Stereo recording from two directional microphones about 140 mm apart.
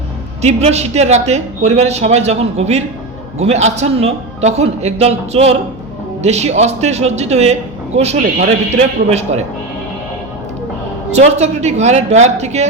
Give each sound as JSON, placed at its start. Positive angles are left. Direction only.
{"t": 0.4, "sound": "a man's voice", "side_deg": -50}
{"t": 11.1, "sound": "a man's voice", "side_deg": -50}